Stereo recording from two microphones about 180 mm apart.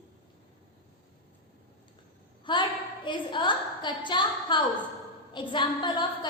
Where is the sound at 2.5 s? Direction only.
25° left (ahead or behind).